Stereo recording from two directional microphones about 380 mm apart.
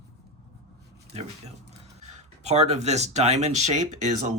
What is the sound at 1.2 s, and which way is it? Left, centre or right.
Speech, centre.